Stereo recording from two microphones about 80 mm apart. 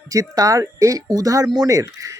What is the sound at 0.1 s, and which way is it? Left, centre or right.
Speech, right.